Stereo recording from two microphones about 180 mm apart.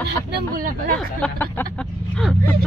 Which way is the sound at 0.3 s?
50° right (ahead or behind).